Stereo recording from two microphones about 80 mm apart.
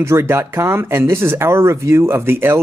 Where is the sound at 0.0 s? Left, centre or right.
Right.